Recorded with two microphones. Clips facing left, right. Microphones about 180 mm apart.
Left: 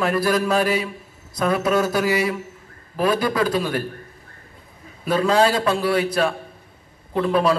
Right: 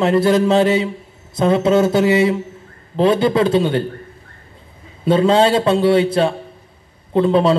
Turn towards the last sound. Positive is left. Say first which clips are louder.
# right 5 dB
turn(degrees=-25)  # may be behind; listen again after turning